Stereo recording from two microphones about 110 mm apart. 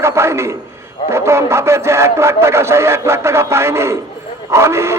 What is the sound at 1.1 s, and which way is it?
Speech, 25° right (ahead or behind).